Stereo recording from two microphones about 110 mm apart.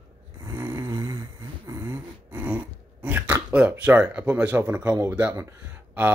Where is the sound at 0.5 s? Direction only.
25° right (ahead or behind).